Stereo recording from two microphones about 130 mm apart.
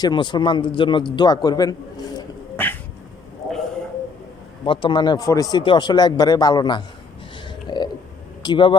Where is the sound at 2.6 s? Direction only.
15° left (ahead or behind).